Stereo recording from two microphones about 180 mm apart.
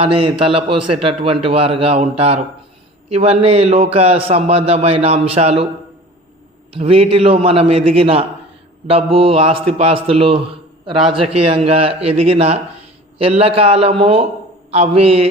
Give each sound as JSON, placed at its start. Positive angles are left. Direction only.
{"t": 0.0, "sound": "a man's voice", "side_deg": -30}
{"t": 6.7, "sound": "a man's voice", "side_deg": -30}